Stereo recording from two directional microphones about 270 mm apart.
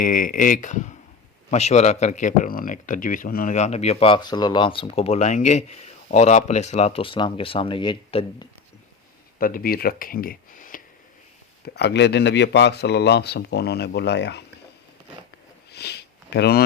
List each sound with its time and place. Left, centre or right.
0.0 s speech: left
9.4 s speech: left
15.7 s sniff: left